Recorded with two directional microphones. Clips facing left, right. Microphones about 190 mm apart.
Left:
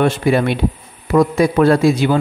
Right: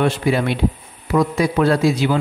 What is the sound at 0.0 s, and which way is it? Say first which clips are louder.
Speech: left 3 dB; 50° left (ahead or behind).